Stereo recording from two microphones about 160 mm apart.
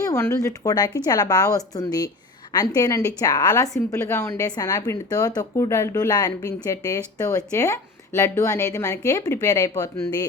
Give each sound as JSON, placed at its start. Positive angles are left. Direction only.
{"t": 0.0, "sound": "a woman's voice", "side_deg": 15}